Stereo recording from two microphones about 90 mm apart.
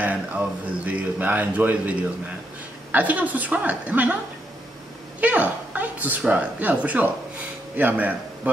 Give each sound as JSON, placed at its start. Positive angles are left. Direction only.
{"t": 0.0, "sound": "speech", "side_deg": -15}
{"t": 5.2, "sound": "a woman's voice", "side_deg": -15}